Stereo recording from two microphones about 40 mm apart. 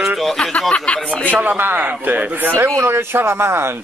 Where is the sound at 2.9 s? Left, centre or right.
Right.